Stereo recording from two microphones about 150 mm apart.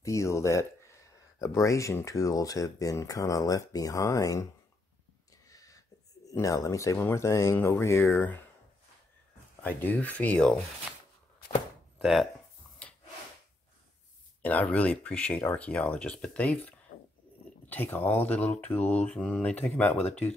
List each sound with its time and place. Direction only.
0.0 s speech: 20° left (ahead or behind)
5.5 s speech: 25° left (ahead or behind)
9.6 s speech: 10° left (ahead or behind)
12.0 s speech: centre (ahead or behind)
12.8 s wood: 10° left (ahead or behind)
14.4 s speech: 10° left (ahead or behind)